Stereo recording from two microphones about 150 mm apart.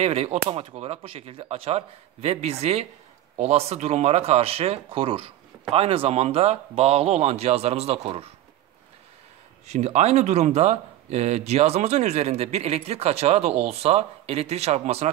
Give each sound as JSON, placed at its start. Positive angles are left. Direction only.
{"t": 0.0, "sound": "speech", "side_deg": -45}
{"t": 9.7, "sound": "speech", "side_deg": -50}